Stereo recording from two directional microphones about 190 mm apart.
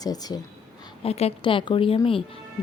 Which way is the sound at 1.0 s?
30° left (ahead or behind).